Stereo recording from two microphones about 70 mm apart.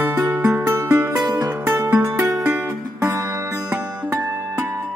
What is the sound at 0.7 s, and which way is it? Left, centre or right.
Music, right.